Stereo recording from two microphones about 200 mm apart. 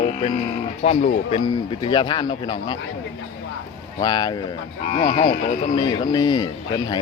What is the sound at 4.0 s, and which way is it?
Speech, 20° left (ahead or behind).